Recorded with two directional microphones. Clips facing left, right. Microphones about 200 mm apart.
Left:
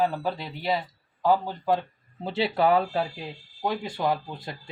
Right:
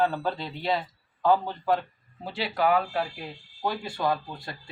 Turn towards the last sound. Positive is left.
turn(degrees=20)  # may be behind; listen again after turning